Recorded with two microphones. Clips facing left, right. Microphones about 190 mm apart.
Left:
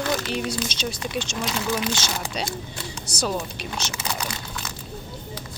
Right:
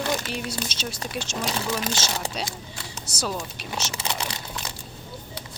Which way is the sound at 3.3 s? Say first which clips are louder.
Left 3 dB; centre (ahead or behind).